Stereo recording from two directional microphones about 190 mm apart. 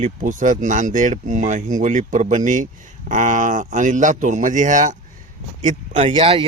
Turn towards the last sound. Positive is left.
turn(degrees=-30)  # may be behind; listen again after turning